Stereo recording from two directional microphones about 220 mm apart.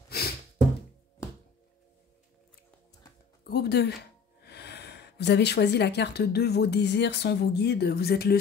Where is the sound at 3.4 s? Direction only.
50° left (ahead or behind).